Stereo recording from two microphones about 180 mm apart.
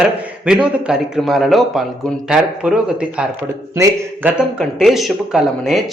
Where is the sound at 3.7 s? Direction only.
15° right (ahead or behind).